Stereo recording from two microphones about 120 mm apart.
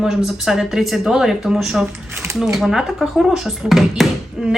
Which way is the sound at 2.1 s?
20° right (ahead or behind).